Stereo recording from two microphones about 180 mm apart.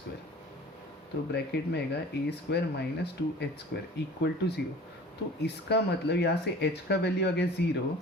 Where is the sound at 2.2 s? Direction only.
70° left (ahead or behind).